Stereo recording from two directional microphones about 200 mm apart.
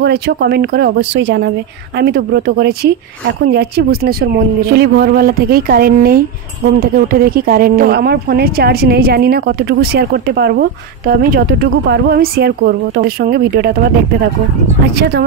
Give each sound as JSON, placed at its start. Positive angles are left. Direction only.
{"t": 0.0, "sound": "speech", "side_deg": -55}
{"t": 15.0, "sound": "speech", "side_deg": -55}